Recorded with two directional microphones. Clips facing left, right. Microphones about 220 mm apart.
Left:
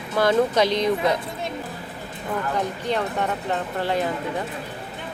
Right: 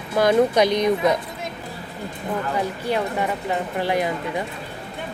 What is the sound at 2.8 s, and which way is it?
Speech, 10° right (ahead or behind).